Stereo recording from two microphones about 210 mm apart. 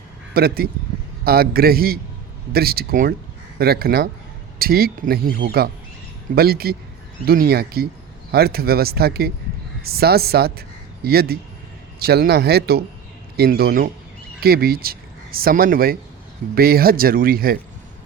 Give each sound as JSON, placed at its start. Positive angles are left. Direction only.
{"t": 0.3, "sound": "speech", "side_deg": -45}